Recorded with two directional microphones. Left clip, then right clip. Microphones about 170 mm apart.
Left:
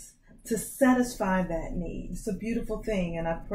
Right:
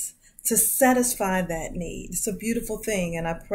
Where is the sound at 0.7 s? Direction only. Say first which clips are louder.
Right 4 dB; 10° right (ahead or behind).